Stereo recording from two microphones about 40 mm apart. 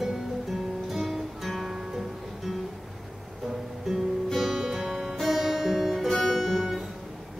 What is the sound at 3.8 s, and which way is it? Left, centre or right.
Music, centre.